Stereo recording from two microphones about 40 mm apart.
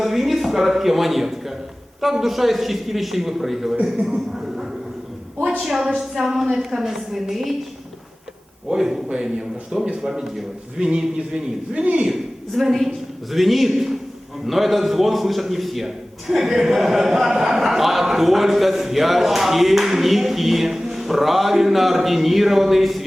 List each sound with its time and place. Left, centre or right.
0.0 s a sound: centre
2.0 s a man's voice: centre
5.6 s a woman's voice: centre
8.7 s a woman's voice: centre
11.7 s a man's voice: right
12.0 s a woman's voice: centre